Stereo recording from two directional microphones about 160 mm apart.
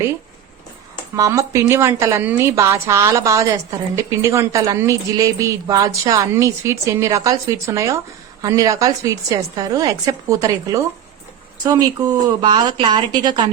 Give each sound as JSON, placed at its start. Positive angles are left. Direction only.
{"t": 1.1, "sound": "a woman's voice", "side_deg": -20}